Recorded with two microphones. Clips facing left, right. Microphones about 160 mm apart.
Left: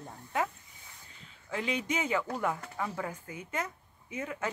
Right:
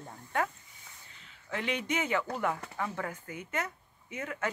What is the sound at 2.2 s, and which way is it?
Speech, 15° left (ahead or behind).